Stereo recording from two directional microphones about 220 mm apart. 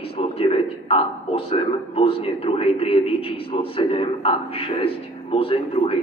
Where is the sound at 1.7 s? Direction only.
25° left (ahead or behind).